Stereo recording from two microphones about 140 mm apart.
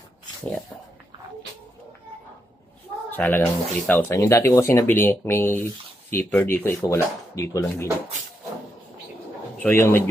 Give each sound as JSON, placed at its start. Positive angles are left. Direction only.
{"t": 3.1, "sound": "speech", "side_deg": 15}
{"t": 9.6, "sound": "speech", "side_deg": 15}